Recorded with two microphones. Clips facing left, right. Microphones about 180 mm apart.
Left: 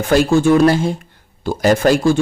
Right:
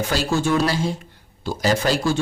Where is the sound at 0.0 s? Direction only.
55° left (ahead or behind).